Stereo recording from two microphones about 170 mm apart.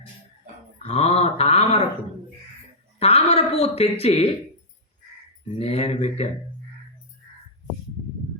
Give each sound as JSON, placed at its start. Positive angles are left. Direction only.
{"t": 0.8, "sound": "a sound", "side_deg": 35}
{"t": 3.0, "sound": "music", "side_deg": 35}
{"t": 5.5, "sound": "speech", "side_deg": 35}